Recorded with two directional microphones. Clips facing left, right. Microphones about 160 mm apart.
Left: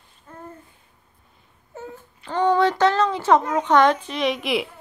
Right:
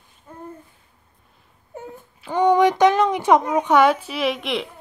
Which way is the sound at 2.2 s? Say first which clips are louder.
Right 3 dB; 15° right (ahead or behind).